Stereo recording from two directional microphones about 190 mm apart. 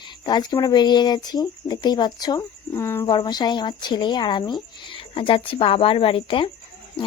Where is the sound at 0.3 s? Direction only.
20° left (ahead or behind).